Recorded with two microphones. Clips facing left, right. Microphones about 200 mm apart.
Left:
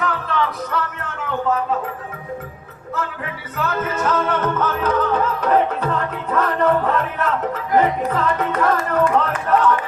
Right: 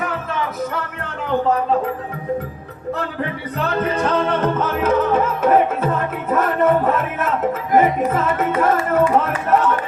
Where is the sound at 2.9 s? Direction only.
35° right (ahead or behind).